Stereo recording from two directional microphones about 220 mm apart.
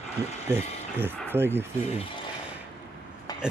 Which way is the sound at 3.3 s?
15° left (ahead or behind).